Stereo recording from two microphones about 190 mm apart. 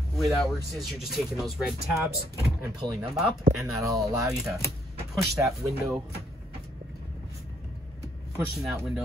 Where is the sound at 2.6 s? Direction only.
10° right (ahead or behind).